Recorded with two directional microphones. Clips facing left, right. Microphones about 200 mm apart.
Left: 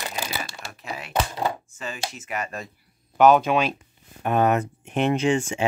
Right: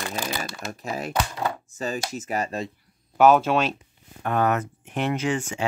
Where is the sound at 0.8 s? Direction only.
40° right (ahead or behind).